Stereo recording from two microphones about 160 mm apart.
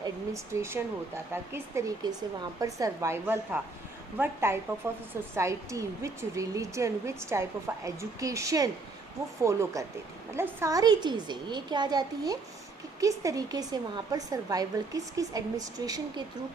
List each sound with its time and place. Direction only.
0.5 s a woman's voice: 15° right (ahead or behind)